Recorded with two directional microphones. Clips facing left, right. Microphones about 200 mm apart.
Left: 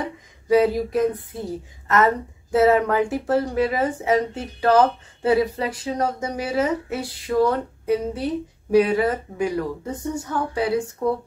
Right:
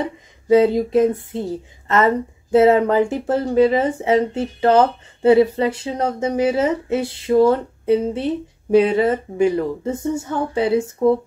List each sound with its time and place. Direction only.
0.5 s speech: 25° right (ahead or behind)